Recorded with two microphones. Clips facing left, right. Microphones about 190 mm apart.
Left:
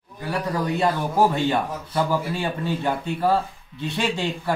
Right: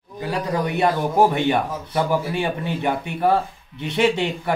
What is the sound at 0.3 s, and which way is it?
A man's voice, 20° right (ahead or behind).